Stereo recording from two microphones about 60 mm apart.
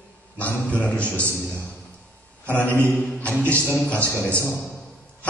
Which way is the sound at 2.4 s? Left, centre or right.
Left.